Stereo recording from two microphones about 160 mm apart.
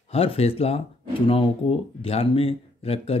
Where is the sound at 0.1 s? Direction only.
35° left (ahead or behind).